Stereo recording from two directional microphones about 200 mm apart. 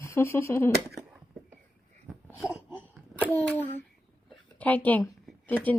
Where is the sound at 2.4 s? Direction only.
10° right (ahead or behind).